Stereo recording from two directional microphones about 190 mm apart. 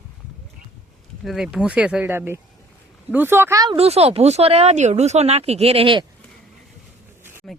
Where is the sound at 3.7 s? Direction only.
30° right (ahead or behind).